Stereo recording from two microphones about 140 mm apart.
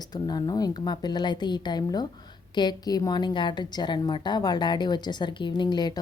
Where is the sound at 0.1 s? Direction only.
30° left (ahead or behind).